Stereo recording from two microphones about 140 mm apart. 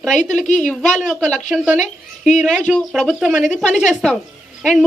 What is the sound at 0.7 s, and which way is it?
Speech, 5° left (ahead or behind).